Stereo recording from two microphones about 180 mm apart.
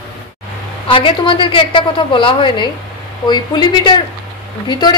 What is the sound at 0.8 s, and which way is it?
A woman's voice, 30° left (ahead or behind).